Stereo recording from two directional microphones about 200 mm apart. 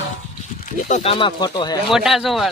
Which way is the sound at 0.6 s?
40° left (ahead or behind).